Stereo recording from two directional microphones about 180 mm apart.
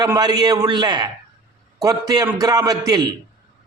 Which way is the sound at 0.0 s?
20° right (ahead or behind).